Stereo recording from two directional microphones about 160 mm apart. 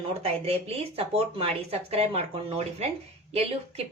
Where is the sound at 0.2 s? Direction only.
40° right (ahead or behind).